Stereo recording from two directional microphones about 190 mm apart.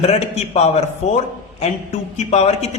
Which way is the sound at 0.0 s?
35° left (ahead or behind).